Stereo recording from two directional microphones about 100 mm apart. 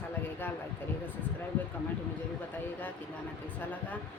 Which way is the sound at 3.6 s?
15° left (ahead or behind).